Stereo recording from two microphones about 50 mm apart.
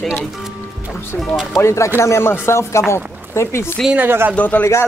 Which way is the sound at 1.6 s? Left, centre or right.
Left.